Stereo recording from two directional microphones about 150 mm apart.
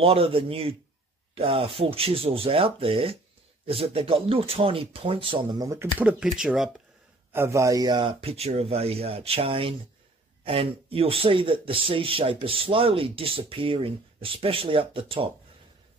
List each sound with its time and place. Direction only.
0.0 s speech: 40° right (ahead or behind); by 6.7 s 5° right (ahead or behind)
7.3 s speech: 20° right (ahead or behind); by 15.2 s 35° right (ahead or behind)